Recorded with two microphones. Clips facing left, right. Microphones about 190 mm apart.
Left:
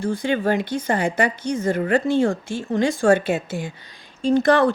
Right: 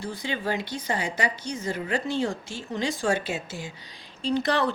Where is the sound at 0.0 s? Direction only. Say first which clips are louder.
Left 9 dB; 50° left (ahead or behind).